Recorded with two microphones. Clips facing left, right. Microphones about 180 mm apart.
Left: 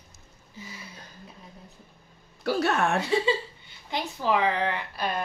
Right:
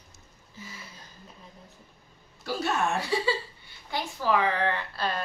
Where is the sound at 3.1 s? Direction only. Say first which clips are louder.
Left 3 dB; 20° left (ahead or behind).